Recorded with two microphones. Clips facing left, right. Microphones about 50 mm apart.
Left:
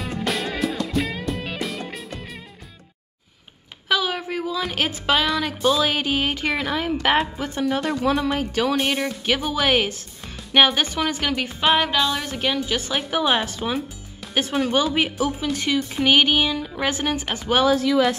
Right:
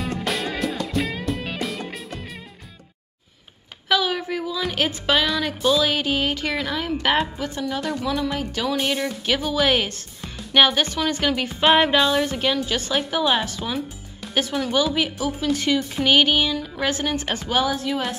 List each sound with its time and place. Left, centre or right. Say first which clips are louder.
0.0 s music: even; centre
3.9 s a sound: right 1 dB; centre
4.6 s speech: right 1 dB; centre
5.6 s speech: right 1 dB; centre
7.4 s speech: left 3 dB; left
8.6 s speech: right 1 dB; centre
12.4 s speech: right 1 dB; centre
14.4 s speech: left 1 dB; left
15.5 s speech: right 1 dB; centre
17.6 s speech: left 6 dB; left